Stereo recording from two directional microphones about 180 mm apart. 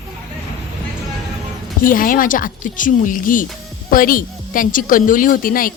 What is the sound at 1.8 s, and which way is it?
A woman's voice, 50° left (ahead or behind).